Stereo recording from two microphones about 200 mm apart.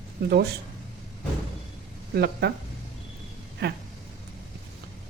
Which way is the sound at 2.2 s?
55° right (ahead or behind).